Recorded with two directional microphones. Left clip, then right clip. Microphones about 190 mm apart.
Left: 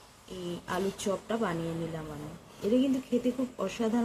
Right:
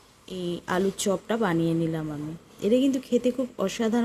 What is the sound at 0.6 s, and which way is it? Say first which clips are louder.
Speech: right 6 dB; 45° right (ahead or behind).